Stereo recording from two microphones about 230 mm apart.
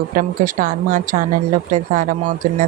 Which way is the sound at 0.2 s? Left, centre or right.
Right.